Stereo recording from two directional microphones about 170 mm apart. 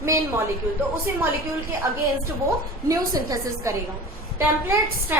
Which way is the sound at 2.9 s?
20° right (ahead or behind).